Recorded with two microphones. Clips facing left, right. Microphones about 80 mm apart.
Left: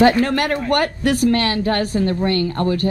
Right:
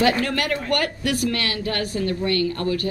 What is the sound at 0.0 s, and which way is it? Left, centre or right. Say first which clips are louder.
Speech: left 6 dB; left.